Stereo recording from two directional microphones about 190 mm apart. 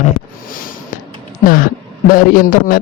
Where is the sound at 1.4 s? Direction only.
45° left (ahead or behind).